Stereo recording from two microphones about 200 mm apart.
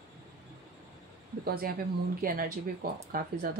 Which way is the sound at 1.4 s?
50° right (ahead or behind).